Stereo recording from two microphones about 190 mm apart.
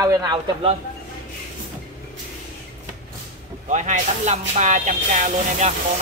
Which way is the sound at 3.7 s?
40° right (ahead or behind).